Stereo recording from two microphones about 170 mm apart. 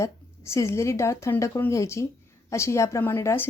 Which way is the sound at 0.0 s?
15° left (ahead or behind).